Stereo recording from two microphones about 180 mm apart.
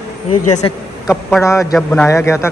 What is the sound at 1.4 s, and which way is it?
A man's voice, 15° left (ahead or behind).